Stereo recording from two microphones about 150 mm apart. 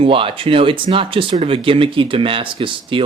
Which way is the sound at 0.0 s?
35° right (ahead or behind).